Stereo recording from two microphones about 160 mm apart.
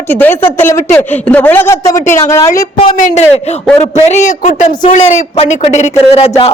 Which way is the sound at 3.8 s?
45° left (ahead or behind).